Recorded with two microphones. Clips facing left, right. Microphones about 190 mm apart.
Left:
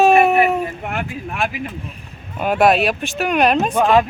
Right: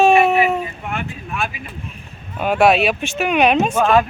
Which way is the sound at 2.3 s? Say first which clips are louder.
Even; 5° left (ahead or behind).